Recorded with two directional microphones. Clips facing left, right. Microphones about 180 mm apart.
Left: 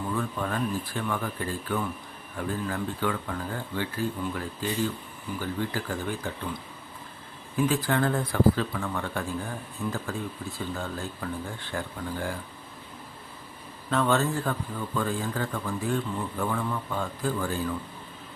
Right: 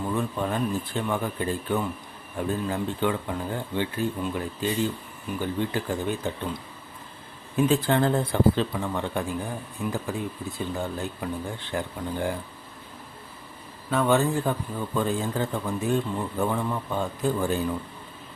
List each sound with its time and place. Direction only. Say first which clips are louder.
0.1 s speech: right 3 dB; 20° right (ahead or behind)
13.9 s speech: right 3 dB; 10° right (ahead or behind)